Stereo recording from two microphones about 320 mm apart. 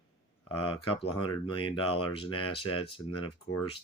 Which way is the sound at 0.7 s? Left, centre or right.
Centre.